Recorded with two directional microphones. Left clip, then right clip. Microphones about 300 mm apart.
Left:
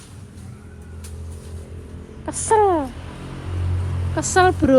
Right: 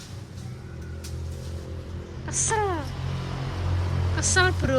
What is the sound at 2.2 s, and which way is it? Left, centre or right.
Speech, centre.